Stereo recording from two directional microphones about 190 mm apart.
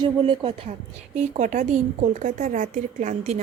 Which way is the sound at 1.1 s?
40° right (ahead or behind).